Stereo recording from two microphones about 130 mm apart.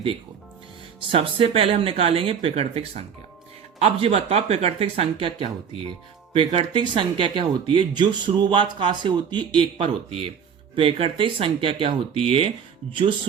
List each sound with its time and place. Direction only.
1.1 s speech: 45° right (ahead or behind)